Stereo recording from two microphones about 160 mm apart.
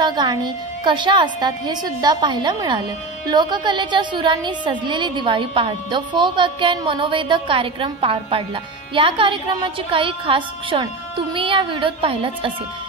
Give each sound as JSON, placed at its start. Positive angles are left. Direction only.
{"t": 0.0, "sound": "music", "side_deg": -25}
{"t": 0.8, "sound": "a woman's voice", "side_deg": -30}